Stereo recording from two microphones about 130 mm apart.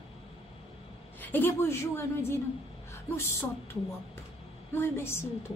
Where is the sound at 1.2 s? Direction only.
15° left (ahead or behind).